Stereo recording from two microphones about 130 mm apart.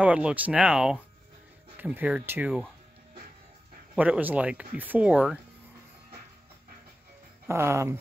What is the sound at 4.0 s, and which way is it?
Speech, 15° right (ahead or behind).